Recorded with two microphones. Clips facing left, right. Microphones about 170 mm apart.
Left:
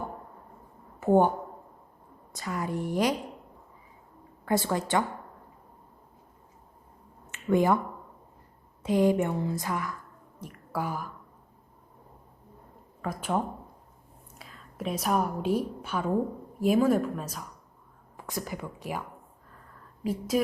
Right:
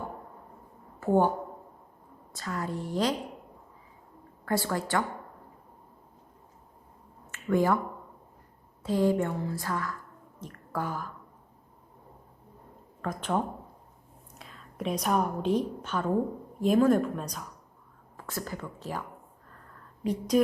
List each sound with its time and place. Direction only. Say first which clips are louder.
0.9 s a woman's voice: left 2 dB; 20° left (ahead or behind)
2.3 s speech: left 2 dB; 15° left (ahead or behind)
4.4 s a woman's voice: left 2 dB; 20° left (ahead or behind)
7.3 s a sound: left 2 dB; 20° left (ahead or behind)
8.8 s speech: left 2 dB; 15° left (ahead or behind)
13.0 s a woman's voice: even; 10° left (ahead or behind)
18.2 s speech: left 1 dB; 15° left (ahead or behind)
20.1 s speech: right 2 dB; 5° left (ahead or behind)